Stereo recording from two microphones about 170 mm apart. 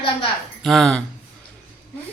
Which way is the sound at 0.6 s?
Centre (ahead or behind).